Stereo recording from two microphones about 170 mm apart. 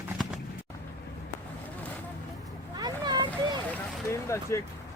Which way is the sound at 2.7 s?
25° right (ahead or behind).